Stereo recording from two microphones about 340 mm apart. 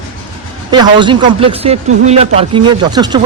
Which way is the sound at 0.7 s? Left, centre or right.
Centre.